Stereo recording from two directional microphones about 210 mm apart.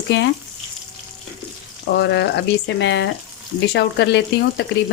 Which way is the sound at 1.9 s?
55° left (ahead or behind).